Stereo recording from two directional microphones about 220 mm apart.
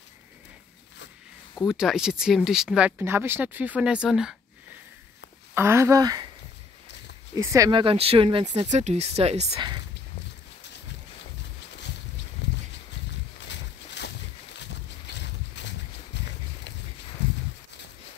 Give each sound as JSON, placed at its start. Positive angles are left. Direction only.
{"t": 1.5, "sound": "speech", "side_deg": 0}
{"t": 5.5, "sound": "speech", "side_deg": -10}
{"t": 7.3, "sound": "speech", "side_deg": -15}
{"t": 12.4, "sound": "a sound", "side_deg": 55}
{"t": 13.5, "sound": "boat", "side_deg": 50}
{"t": 15.6, "sound": "a sound", "side_deg": 55}